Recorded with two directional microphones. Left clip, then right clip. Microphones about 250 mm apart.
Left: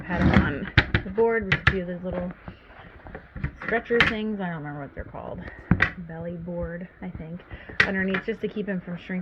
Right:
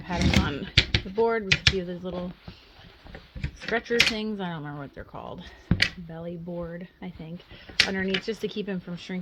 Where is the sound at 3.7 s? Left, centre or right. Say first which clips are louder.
Left 2 dB; right.